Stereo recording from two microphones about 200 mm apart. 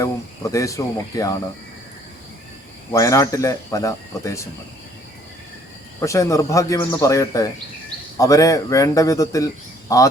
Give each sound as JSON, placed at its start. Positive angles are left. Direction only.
{"t": 0.0, "sound": "speech", "side_deg": 15}
{"t": 2.9, "sound": "speech", "side_deg": 15}
{"t": 6.0, "sound": "speech", "side_deg": 15}